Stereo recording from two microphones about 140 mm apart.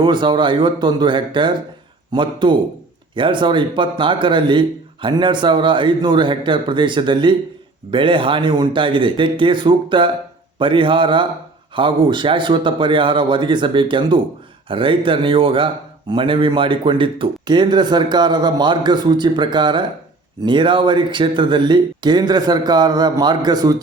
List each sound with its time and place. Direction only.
0.0 s speech: 35° right (ahead or behind)